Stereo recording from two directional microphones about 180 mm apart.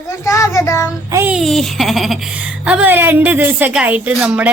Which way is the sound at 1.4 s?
Centre (ahead or behind).